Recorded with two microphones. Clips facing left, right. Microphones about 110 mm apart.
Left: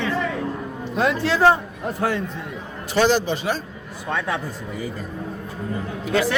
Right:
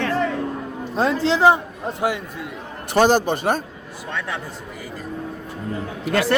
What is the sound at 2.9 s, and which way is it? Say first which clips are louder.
Speech: right 2 dB; 50° right (ahead or behind).